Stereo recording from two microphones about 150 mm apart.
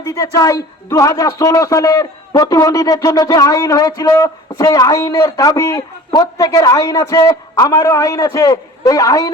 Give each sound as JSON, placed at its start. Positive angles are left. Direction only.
{"t": 0.0, "sound": "a man's voice", "side_deg": 20}